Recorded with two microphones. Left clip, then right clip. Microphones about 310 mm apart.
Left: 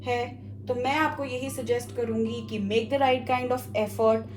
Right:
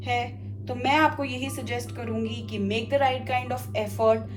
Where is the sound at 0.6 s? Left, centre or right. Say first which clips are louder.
Right 3 dB; centre.